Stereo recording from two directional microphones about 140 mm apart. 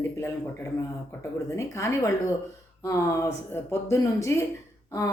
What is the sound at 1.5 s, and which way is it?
Speech, 20° left (ahead or behind).